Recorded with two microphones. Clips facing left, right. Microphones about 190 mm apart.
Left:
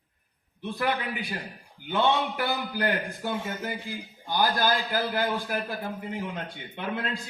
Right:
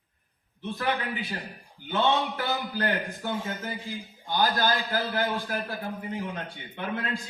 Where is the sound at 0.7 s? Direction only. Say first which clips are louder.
Left 1 dB; 15° left (ahead or behind).